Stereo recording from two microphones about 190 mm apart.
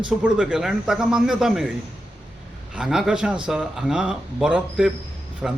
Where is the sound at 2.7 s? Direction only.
5° right (ahead or behind).